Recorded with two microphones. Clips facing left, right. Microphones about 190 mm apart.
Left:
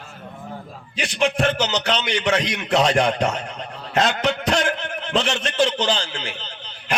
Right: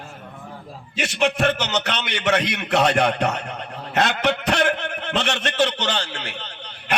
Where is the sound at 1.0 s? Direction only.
65° right (ahead or behind).